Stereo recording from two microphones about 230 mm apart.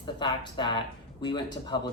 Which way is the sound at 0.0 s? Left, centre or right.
Centre.